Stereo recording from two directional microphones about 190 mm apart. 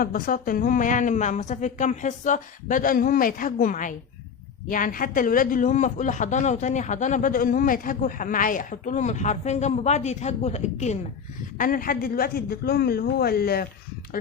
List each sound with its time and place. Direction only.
0.0 s a man's voice: 50° left (ahead or behind)